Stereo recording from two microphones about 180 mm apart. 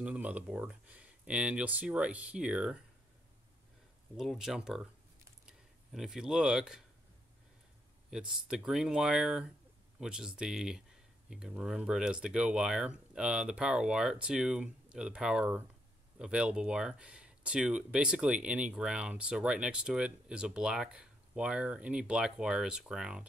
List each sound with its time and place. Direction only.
0.0 s speech: 5° right (ahead or behind)
4.2 s speech: centre (ahead or behind)
8.1 s speech: 5° right (ahead or behind)